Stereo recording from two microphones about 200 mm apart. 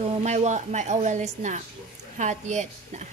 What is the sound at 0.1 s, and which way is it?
Speech, 35° right (ahead or behind).